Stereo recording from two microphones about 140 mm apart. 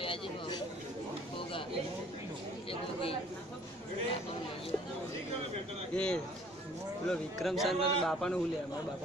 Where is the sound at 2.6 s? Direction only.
40° left (ahead or behind).